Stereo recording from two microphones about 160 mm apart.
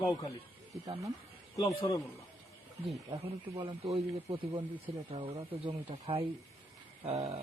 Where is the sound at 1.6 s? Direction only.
25° left (ahead or behind).